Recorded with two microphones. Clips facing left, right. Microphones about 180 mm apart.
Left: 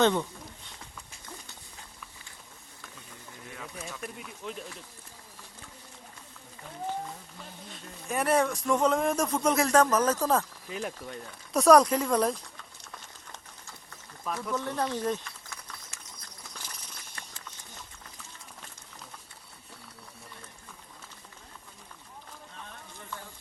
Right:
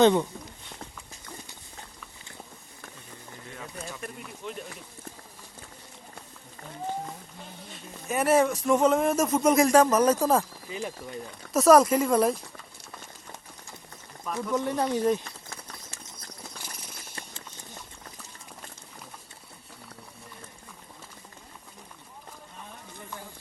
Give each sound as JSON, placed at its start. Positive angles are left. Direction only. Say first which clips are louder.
{"t": 0.0, "sound": "speech", "louder": "right 5 dB", "side_deg": -15}
{"t": 3.5, "sound": "speech", "louder": "right 2 dB", "side_deg": 0}
{"t": 7.7, "sound": "speech", "louder": "right 3 dB", "side_deg": -5}
{"t": 10.7, "sound": "speech", "louder": "right 1 dB", "side_deg": 0}
{"t": 12.9, "sound": "a sound", "louder": "right 4 dB", "side_deg": -10}
{"t": 14.5, "sound": "speech", "louder": "right 5 dB", "side_deg": -15}
{"t": 15.2, "sound": "horse", "louder": "right 3 dB", "side_deg": -35}
{"t": 17.2, "sound": "clip-clop", "louder": "right 5 dB", "side_deg": -30}